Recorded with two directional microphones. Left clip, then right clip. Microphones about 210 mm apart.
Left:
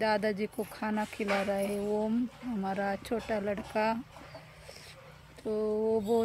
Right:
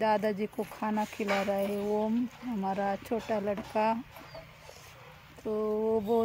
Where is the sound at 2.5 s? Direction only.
15° right (ahead or behind).